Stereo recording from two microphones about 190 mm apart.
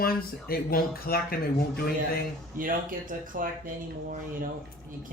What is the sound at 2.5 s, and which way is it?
Speech, 45° right (ahead or behind).